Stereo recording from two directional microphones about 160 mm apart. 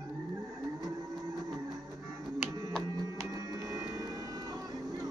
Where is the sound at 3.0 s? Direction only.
20° right (ahead or behind).